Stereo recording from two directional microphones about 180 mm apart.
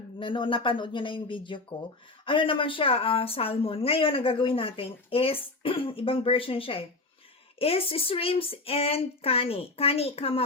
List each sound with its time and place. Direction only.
0.2 s speech: 30° left (ahead or behind)